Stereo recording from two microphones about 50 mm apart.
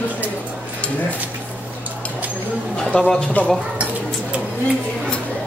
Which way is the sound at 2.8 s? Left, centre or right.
Centre.